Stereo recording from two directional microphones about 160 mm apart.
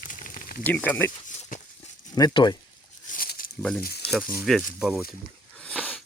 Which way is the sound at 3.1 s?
65° left (ahead or behind).